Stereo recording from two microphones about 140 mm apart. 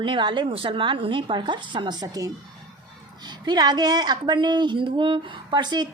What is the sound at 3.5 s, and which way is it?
A woman's voice, 30° right (ahead or behind).